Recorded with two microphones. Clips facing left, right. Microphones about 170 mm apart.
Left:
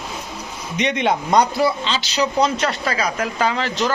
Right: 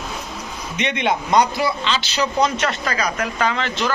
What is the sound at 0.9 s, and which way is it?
Speech, 45° left (ahead or behind).